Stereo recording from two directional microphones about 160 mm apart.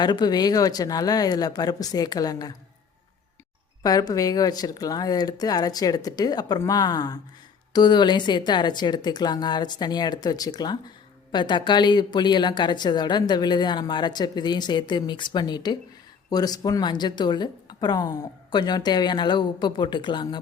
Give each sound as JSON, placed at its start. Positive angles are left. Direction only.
{"t": 0.0, "sound": "speech", "side_deg": 25}
{"t": 3.8, "sound": "speech", "side_deg": 25}